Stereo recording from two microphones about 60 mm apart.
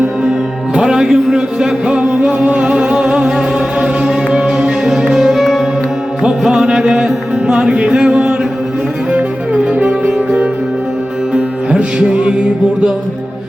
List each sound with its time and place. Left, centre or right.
0.7 s music: centre